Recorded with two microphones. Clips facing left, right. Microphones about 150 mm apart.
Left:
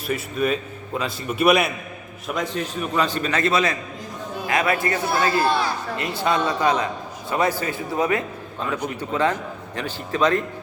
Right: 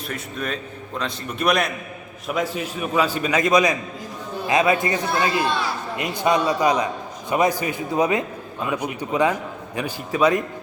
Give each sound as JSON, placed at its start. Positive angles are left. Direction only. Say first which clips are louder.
{"t": 0.1, "sound": "a man's voice", "louder": "left 7 dB", "side_deg": 5}
{"t": 2.2, "sound": "a man's voice", "louder": "right 1 dB", "side_deg": -5}